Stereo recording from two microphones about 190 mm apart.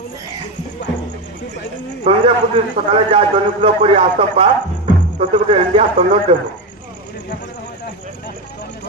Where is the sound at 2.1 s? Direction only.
30° right (ahead or behind).